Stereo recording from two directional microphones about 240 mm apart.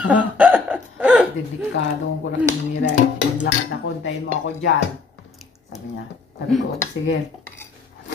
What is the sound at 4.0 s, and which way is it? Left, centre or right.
Speech, left.